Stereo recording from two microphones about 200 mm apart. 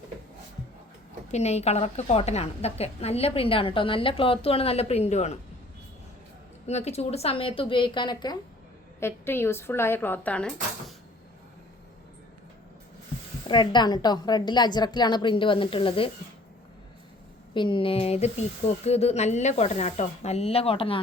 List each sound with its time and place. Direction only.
1.3 s a woman's voice: 35° left (ahead or behind)
6.7 s a woman's voice: 35° left (ahead or behind); by 10.9 s 5° left (ahead or behind)
13.5 s a woman's voice: 20° left (ahead or behind)
17.5 s a woman's voice: 25° left (ahead or behind)